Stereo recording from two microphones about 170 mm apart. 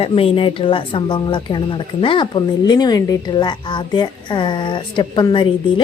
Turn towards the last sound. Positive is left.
turn(degrees=30)  # may be behind; listen again after turning